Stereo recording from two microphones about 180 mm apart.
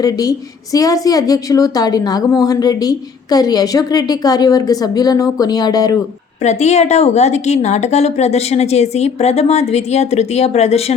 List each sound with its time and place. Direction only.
0.0 s a woman's voice: 20° left (ahead or behind)
6.4 s a woman's voice: 40° left (ahead or behind)